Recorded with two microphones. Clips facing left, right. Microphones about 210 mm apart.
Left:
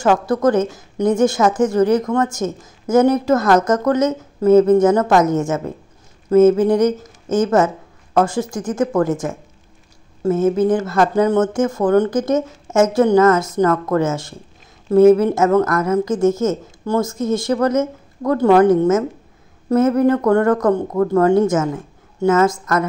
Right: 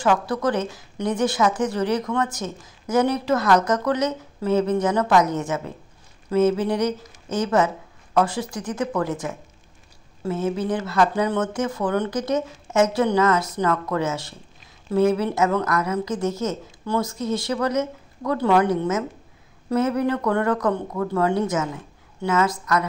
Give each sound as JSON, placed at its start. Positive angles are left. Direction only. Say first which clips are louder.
{"t": 0.0, "sound": "a woman's voice", "louder": "left 6 dB", "side_deg": 45}